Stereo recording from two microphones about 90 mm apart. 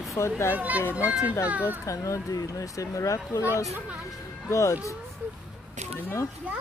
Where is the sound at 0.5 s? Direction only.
20° right (ahead or behind).